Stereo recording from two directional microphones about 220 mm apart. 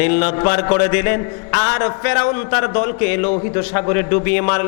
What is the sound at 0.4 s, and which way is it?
A man's voice, 15° left (ahead or behind).